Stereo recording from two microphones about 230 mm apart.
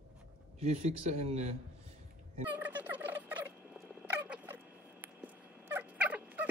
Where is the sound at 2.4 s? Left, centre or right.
Centre.